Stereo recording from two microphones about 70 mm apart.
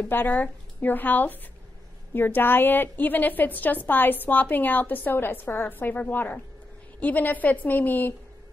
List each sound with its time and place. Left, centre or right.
0.0 s a woman's voice: left